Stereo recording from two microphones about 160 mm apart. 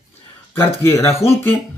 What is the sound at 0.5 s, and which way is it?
Speech, 15° left (ahead or behind).